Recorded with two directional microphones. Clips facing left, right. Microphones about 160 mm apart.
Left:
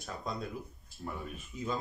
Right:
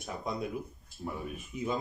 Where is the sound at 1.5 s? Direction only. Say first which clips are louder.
Right 4 dB; 20° right (ahead or behind).